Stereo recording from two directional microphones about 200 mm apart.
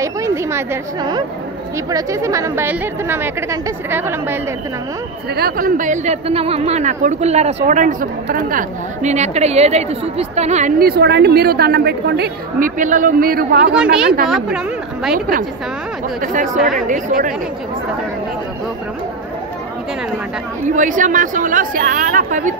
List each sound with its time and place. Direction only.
0.0 s a woman's voice: 15° right (ahead or behind)
5.3 s a woman's voice: 50° right (ahead or behind)
13.7 s a woman's voice: 5° right (ahead or behind)
15.1 s a woman's voice: 45° right (ahead or behind)
20.7 s speech: 40° right (ahead or behind)